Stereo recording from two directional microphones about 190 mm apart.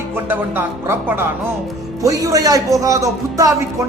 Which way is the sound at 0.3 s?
10° right (ahead or behind).